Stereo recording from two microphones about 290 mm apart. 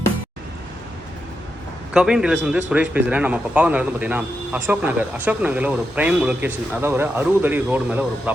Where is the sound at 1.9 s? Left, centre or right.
Centre.